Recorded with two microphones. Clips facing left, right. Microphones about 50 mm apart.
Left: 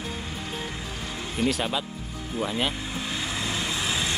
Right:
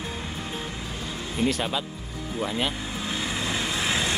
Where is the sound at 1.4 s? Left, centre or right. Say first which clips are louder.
Left 1 dB; centre.